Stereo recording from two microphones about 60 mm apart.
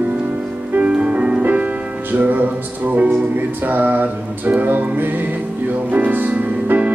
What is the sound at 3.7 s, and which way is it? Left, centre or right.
Music, right.